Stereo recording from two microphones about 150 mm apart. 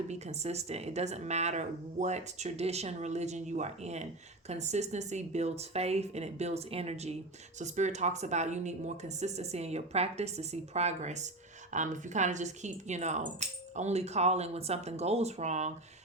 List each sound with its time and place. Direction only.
0.1 s speech: 45° right (ahead or behind)